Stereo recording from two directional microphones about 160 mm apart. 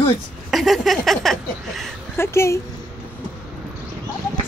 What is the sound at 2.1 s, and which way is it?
Speech, 15° left (ahead or behind).